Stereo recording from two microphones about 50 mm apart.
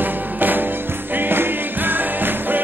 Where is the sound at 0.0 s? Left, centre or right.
Right.